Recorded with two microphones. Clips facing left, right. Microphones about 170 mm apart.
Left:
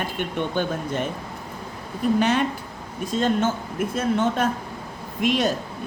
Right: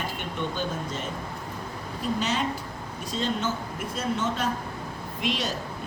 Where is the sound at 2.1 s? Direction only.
55° left (ahead or behind).